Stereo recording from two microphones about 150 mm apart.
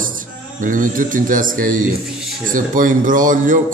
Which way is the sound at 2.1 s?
5° right (ahead or behind).